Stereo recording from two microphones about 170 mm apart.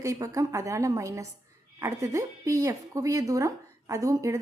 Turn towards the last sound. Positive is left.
turn(degrees=-20)  # may be behind; listen again after turning